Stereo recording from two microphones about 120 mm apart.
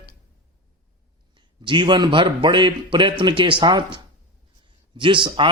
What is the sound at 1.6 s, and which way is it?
A man's voice, 40° right (ahead or behind).